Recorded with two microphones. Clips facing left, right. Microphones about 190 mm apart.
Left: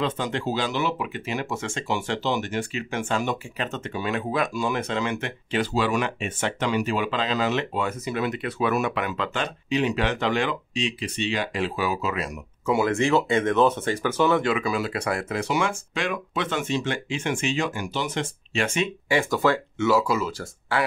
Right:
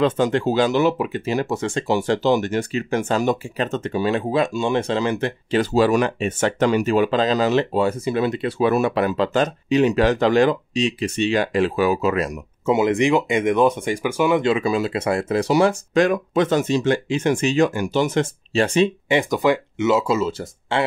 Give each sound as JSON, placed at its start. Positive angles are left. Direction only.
{"t": 0.0, "sound": "speech", "side_deg": -45}
{"t": 12.6, "sound": "speech", "side_deg": -20}
{"t": 14.4, "sound": "speech", "side_deg": -25}
{"t": 19.0, "sound": "speech", "side_deg": -20}